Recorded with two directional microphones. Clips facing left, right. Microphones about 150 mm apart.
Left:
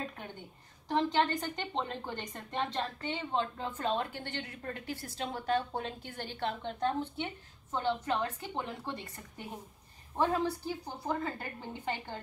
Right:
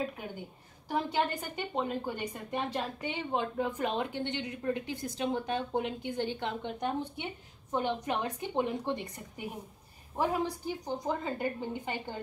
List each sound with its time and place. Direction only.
0.8 s a woman's voice: 10° right (ahead or behind)